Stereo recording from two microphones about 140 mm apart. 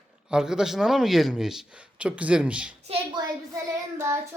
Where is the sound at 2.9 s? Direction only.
45° right (ahead or behind).